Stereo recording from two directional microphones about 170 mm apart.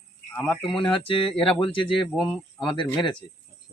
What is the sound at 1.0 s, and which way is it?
Speech, 30° left (ahead or behind).